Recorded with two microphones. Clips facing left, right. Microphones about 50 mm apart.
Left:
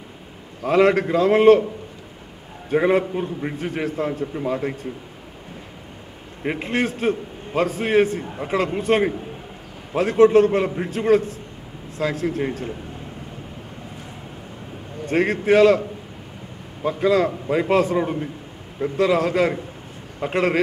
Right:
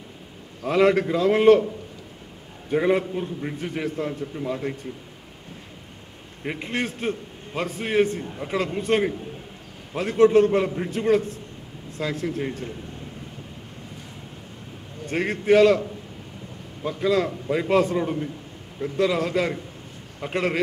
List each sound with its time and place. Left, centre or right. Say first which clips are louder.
0.7 s a man's voice: left 2 dB; centre
2.7 s a man's voice: left 3 dB; centre
6.4 s a man's voice: left 5 dB; centre
15.0 s a man's voice: left 2 dB; centre
16.8 s a man's voice: left 4 dB; centre